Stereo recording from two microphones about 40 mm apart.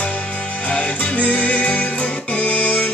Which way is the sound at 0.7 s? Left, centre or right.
Left.